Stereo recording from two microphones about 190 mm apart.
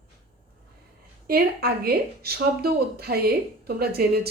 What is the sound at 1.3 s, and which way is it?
A woman's voice, 55° right (ahead or behind).